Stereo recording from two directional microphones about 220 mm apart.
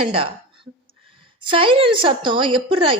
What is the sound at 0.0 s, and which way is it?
A woman's voice, 25° right (ahead or behind).